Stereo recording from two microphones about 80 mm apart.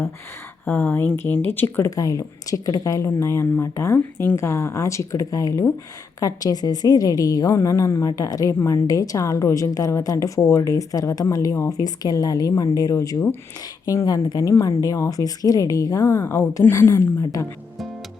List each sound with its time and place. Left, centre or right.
0.6 s speech: centre
2.0 s a woman's voice: left
3.1 s a woman's voice: left
7.5 s speech: left
8.1 s a woman's voice: left
16.0 s speech: left